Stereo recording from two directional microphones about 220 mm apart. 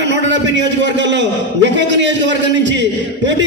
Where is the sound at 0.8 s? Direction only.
55° right (ahead or behind).